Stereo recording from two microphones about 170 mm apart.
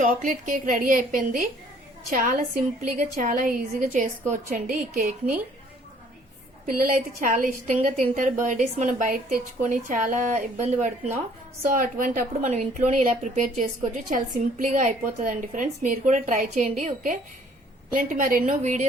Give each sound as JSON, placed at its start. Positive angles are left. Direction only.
{"t": 0.0, "sound": "a woman's voice", "side_deg": -50}
{"t": 6.7, "sound": "a woman's voice", "side_deg": -55}